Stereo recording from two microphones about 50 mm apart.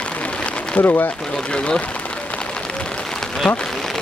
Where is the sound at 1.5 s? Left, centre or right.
Centre.